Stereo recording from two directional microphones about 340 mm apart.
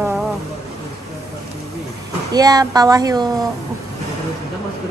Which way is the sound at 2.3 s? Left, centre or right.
Centre.